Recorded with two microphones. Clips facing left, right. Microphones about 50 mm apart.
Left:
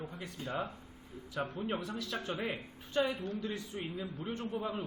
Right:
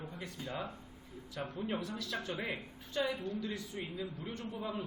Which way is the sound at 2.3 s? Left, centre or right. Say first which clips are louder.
Left 2 dB; centre.